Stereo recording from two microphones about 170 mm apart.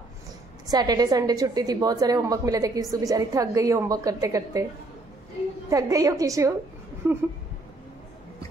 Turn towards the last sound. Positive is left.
turn(degrees=-15)  # may be behind; listen again after turning